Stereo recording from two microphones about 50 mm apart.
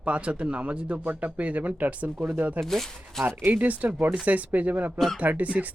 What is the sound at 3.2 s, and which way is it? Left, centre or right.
Speech, right.